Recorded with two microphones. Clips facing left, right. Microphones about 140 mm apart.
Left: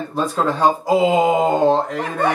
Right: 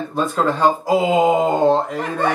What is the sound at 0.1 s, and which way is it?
Speech, centre (ahead or behind).